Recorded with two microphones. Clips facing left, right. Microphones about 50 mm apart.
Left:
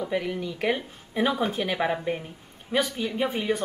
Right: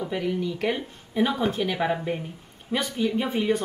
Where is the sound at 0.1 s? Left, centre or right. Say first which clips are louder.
Right 1 dB; centre.